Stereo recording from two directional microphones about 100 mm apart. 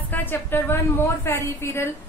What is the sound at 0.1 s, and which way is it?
A woman's voice, 20° left (ahead or behind).